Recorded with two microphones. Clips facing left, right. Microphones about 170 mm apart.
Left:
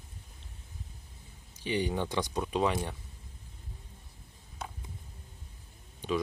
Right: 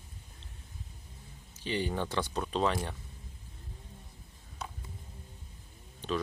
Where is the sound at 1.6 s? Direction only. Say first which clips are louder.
Left 2 dB; 15° left (ahead or behind).